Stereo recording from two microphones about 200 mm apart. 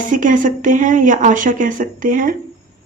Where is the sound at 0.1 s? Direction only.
40° right (ahead or behind).